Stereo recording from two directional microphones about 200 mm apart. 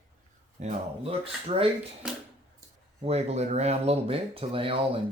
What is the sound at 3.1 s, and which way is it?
Speech, 30° right (ahead or behind).